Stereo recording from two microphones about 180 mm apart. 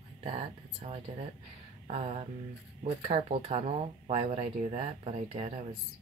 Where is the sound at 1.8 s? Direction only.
40° right (ahead or behind).